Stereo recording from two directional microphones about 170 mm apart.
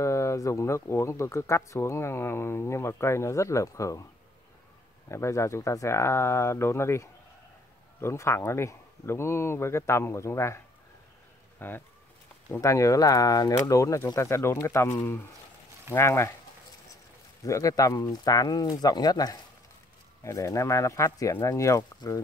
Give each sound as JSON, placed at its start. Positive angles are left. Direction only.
{"t": 0.0, "sound": "speech", "side_deg": 15}
{"t": 5.1, "sound": "speech", "side_deg": 15}
{"t": 11.6, "sound": "speech", "side_deg": 10}
{"t": 17.5, "sound": "speech", "side_deg": 20}